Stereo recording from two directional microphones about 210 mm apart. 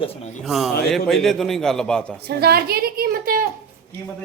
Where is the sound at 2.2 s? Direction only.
50° right (ahead or behind).